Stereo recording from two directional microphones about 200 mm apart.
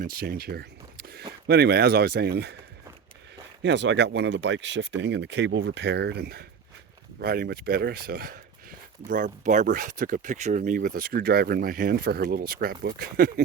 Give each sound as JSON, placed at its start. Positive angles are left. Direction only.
{"t": 0.0, "sound": "speech", "side_deg": -50}
{"t": 3.6, "sound": "speech", "side_deg": -60}